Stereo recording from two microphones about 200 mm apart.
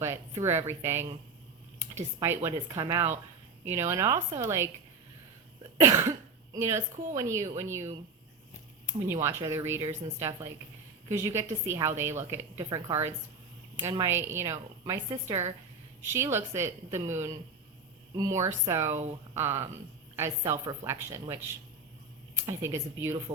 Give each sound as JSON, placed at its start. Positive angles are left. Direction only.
{"t": 0.0, "sound": "a woman's voice", "side_deg": -15}
{"t": 5.7, "sound": "a woman's voice", "side_deg": -15}
{"t": 9.2, "sound": "a woman's voice", "side_deg": -15}